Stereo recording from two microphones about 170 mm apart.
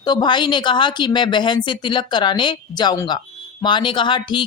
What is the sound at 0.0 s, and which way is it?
Speech, 25° left (ahead or behind).